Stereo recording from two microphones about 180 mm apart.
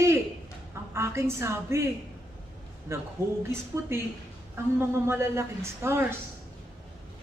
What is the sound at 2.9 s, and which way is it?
A man's voice, 15° right (ahead or behind).